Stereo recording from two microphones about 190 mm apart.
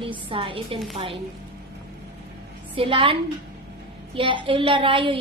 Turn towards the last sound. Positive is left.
turn(degrees=-25)  # may be behind; listen again after turning